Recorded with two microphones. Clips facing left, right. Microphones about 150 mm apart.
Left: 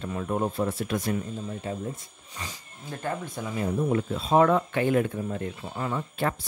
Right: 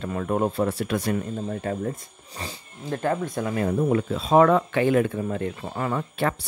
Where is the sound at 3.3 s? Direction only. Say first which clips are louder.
Right 5 dB; 70° right (ahead or behind).